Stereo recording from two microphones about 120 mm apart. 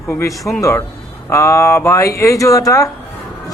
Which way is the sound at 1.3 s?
25° left (ahead or behind).